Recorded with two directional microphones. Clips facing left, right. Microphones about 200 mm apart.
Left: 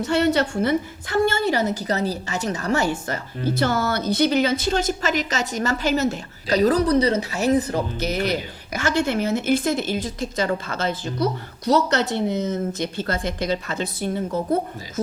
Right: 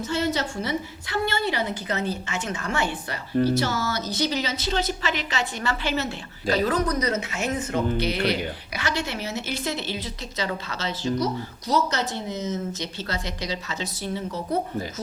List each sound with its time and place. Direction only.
0.0 s speech: 65° left (ahead or behind); by 3.2 s 40° left (ahead or behind)
3.6 s speech: 55° left (ahead or behind)